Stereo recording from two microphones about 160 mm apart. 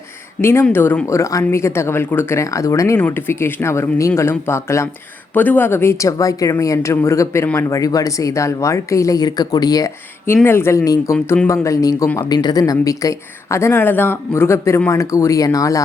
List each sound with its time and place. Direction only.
0.4 s a woman's voice: 15° left (ahead or behind)